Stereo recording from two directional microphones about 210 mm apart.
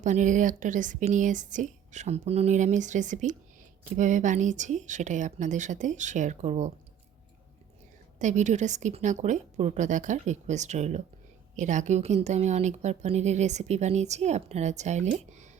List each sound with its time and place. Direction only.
0.0 s a woman's voice: 35° right (ahead or behind)
8.2 s a woman's voice: 35° right (ahead or behind)